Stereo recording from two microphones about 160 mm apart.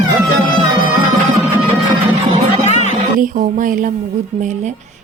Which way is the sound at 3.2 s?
55° right (ahead or behind).